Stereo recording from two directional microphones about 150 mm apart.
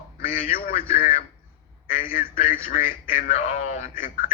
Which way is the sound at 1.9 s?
65° left (ahead or behind).